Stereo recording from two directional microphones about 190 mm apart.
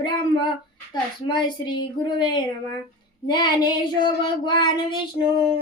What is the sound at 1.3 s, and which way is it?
Child singing, 25° left (ahead or behind).